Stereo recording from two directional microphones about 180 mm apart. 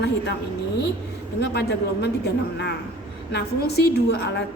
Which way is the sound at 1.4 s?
65° left (ahead or behind).